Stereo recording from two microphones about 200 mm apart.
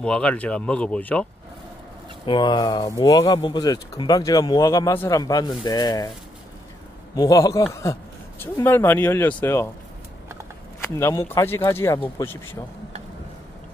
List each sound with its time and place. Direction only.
0.0 s speech: 5° left (ahead or behind)
2.2 s speech: 25° left (ahead or behind)
7.2 s speech: 15° left (ahead or behind)
10.8 s speech: 15° left (ahead or behind)